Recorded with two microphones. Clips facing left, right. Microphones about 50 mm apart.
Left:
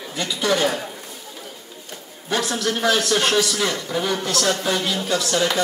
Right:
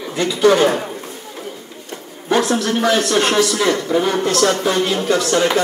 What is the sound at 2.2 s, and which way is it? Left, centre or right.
A woman's voice, right.